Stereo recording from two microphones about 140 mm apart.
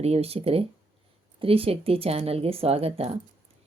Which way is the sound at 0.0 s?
45° right (ahead or behind).